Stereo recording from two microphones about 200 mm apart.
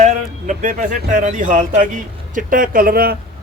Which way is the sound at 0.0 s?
40° right (ahead or behind).